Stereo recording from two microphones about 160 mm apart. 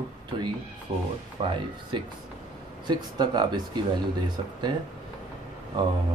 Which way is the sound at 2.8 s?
25° right (ahead or behind).